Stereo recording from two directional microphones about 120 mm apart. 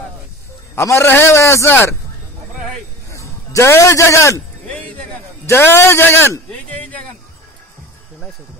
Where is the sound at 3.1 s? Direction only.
25° left (ahead or behind).